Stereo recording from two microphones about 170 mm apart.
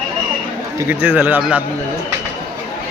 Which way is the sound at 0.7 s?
10° right (ahead or behind).